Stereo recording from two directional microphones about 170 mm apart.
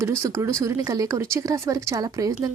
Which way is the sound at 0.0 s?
15° right (ahead or behind).